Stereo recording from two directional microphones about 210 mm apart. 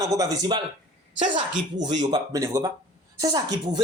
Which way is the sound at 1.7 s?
60° right (ahead or behind).